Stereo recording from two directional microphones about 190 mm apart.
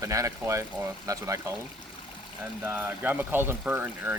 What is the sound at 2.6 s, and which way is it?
Speech, 10° right (ahead or behind).